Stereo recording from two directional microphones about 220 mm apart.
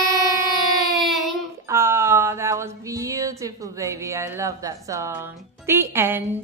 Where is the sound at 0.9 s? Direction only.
Centre (ahead or behind).